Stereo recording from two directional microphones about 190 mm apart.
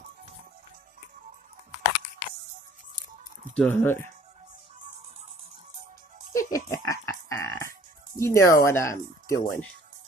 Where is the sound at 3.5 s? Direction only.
10° left (ahead or behind).